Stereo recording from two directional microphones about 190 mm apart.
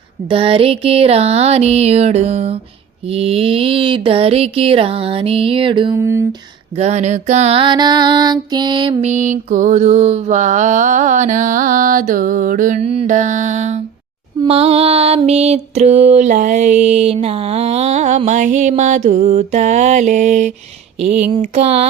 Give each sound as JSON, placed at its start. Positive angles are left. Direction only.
{"t": 0.3, "sound": "music", "side_deg": -30}
{"t": 3.1, "sound": "a sound", "side_deg": -30}
{"t": 6.0, "sound": "speech", "side_deg": -15}
{"t": 6.7, "sound": "music", "side_deg": -35}